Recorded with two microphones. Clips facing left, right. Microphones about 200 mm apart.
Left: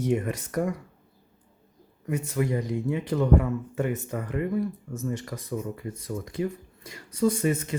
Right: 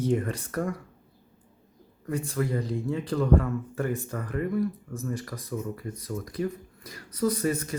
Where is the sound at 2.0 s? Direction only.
20° left (ahead or behind).